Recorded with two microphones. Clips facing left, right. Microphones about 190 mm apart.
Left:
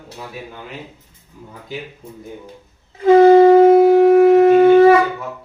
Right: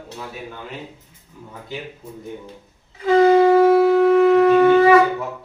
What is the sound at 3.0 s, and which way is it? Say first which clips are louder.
Shofar: left 5 dB; 45° left (ahead or behind).